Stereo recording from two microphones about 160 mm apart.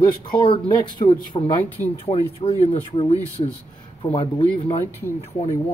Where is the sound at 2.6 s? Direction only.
40° left (ahead or behind).